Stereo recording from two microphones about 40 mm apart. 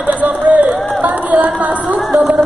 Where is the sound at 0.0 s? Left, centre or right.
Right.